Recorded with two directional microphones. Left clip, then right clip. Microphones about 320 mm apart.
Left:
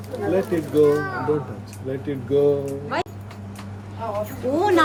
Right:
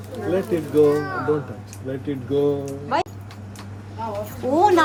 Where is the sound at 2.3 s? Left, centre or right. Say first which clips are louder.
Left 3 dB; centre.